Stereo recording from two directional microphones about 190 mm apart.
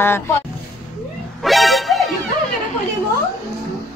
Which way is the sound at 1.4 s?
Centre (ahead or behind).